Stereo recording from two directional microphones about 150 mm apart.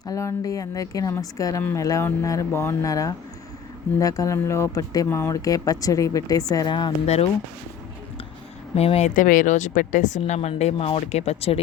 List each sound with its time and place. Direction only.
0.0 s speech: 20° left (ahead or behind)
8.7 s speech: 45° left (ahead or behind)